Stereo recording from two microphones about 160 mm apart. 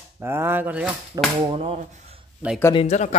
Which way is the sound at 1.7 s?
45° right (ahead or behind).